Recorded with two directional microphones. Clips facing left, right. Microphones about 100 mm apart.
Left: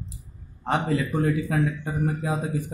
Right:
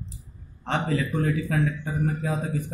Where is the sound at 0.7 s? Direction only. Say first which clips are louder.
Left 2 dB; 15° left (ahead or behind).